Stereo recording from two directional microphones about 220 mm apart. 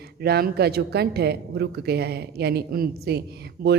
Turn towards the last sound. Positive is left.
turn(degrees=-45)  # may be behind; listen again after turning